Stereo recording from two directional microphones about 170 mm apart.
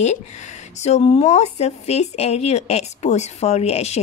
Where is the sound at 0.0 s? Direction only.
40° left (ahead or behind).